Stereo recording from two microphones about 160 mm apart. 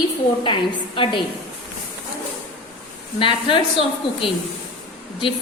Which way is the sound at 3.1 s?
30° left (ahead or behind).